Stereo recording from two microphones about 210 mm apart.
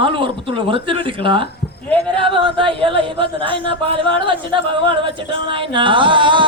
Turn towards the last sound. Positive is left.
turn(degrees=-25)  # may be behind; listen again after turning